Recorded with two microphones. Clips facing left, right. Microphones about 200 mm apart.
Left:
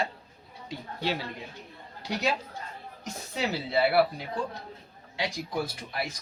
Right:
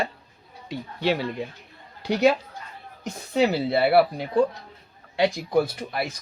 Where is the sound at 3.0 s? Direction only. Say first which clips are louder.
Right 10 dB; 55° right (ahead or behind).